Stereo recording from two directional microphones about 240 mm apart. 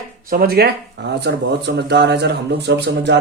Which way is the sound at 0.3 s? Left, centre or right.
Right.